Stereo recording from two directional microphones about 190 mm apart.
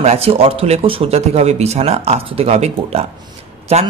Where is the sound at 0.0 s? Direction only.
35° right (ahead or behind).